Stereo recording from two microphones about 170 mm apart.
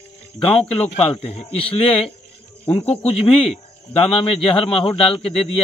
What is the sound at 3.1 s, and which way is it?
A man's voice, 35° left (ahead or behind).